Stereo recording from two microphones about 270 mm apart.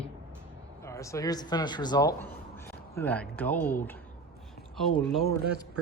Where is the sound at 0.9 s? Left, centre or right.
Centre.